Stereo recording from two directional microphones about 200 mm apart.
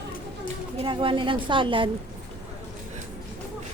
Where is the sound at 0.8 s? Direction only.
25° right (ahead or behind).